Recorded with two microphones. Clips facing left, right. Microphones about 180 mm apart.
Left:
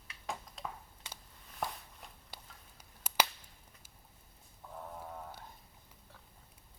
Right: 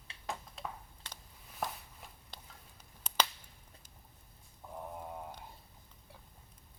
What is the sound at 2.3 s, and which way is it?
Finger snapping, 10° left (ahead or behind).